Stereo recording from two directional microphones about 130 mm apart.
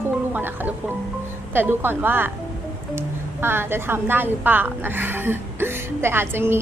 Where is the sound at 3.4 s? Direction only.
15° right (ahead or behind).